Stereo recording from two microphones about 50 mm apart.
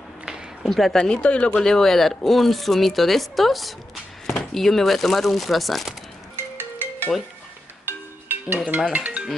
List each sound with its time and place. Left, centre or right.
0.7 s speech: centre
1.0 s speech: left
1.6 s speech: centre
6.3 s music: right
8.9 s speech: right